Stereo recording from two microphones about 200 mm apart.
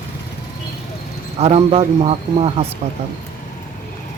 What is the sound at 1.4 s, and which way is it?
Speech, 30° right (ahead or behind).